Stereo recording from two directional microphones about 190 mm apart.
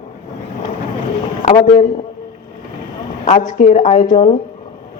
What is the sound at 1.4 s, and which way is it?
Speech, 40° left (ahead or behind).